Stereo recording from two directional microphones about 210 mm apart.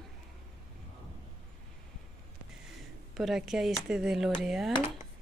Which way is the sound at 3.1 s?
Centre (ahead or behind).